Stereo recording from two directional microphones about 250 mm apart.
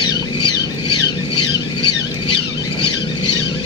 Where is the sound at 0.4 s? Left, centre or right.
Left.